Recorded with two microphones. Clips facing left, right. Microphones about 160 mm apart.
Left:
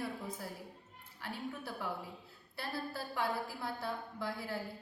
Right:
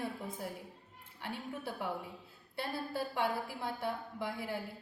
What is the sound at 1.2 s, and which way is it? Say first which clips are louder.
A woman's voice: right 1 dB; 20° right (ahead or behind).